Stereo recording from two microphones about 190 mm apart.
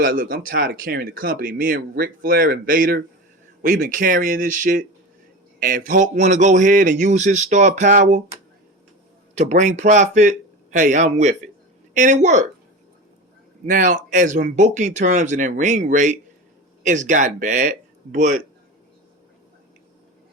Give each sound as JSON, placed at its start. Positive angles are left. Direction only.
{"t": 0.0, "sound": "speech", "side_deg": -45}
{"t": 9.3, "sound": "speech", "side_deg": -40}
{"t": 13.7, "sound": "speech", "side_deg": -45}